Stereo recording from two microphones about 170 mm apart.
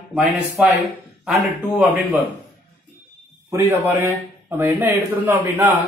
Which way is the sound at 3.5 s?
15° right (ahead or behind).